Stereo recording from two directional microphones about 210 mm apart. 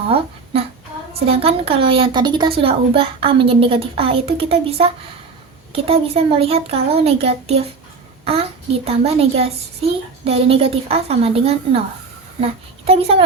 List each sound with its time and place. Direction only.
1.2 s a woman's voice: 25° right (ahead or behind)